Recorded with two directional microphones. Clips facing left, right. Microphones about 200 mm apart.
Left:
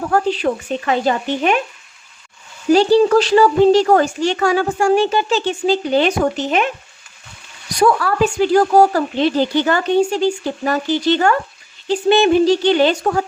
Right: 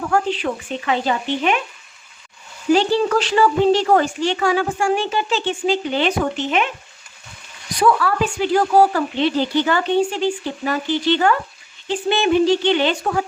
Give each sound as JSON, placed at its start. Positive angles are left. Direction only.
{"t": 0.1, "sound": "speech", "side_deg": 40}
{"t": 2.7, "sound": "speech", "side_deg": 40}
{"t": 7.8, "sound": "speech", "side_deg": 40}